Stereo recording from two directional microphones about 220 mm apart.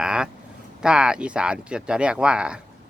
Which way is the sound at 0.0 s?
5° right (ahead or behind).